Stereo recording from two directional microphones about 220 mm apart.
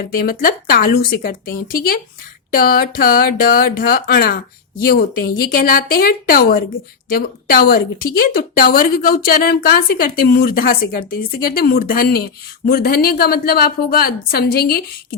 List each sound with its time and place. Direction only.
0.1 s a woman's voice: 40° left (ahead or behind)